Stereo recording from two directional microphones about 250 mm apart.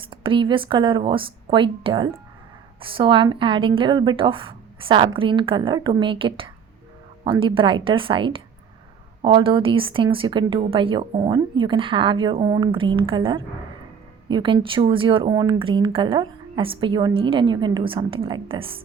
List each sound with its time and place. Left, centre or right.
0.1 s speech: right